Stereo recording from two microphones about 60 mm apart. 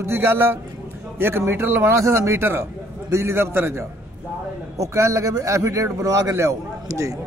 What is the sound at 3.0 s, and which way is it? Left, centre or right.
Speech, right.